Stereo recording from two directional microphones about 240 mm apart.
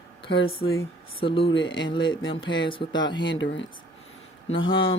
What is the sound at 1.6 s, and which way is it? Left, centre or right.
Speech, left.